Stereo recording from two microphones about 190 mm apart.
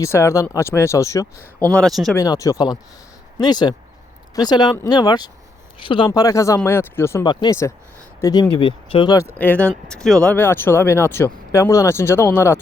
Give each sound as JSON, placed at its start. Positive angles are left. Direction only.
{"t": 0.0, "sound": "speech", "side_deg": 15}
{"t": 1.7, "sound": "speech", "side_deg": 0}
{"t": 2.1, "sound": "speech", "side_deg": 20}